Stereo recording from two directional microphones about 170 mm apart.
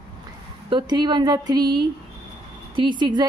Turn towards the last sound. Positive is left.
turn(degrees=-25)  # may be behind; listen again after turning